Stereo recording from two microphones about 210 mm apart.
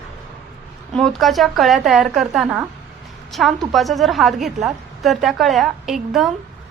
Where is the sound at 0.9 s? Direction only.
Centre (ahead or behind).